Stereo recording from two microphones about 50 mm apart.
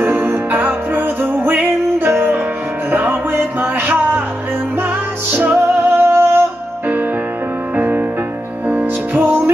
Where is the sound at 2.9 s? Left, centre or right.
Right.